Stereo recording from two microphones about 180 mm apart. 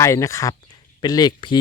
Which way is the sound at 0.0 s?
15° left (ahead or behind).